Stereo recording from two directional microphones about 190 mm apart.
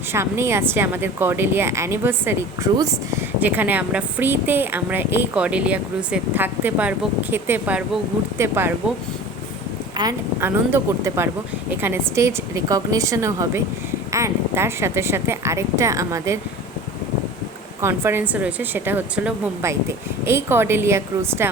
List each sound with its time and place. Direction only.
0.1 s speech: 15° right (ahead or behind)
10.0 s speech: 15° right (ahead or behind)
17.7 s speech: 15° right (ahead or behind)